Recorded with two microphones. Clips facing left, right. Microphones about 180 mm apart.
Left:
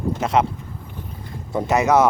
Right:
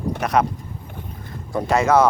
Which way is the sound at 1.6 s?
20° left (ahead or behind).